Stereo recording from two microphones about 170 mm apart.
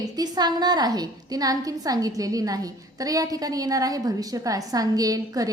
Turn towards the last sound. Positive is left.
turn(degrees=-20)  # may be behind; listen again after turning